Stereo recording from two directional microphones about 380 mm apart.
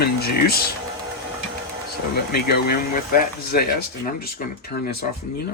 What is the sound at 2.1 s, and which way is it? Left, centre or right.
Speech, left.